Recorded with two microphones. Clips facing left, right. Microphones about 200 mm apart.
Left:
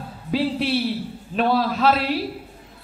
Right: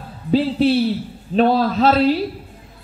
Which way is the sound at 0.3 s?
30° right (ahead or behind).